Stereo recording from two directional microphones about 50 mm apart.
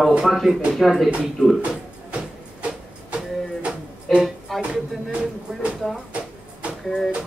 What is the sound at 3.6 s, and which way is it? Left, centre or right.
Music, right.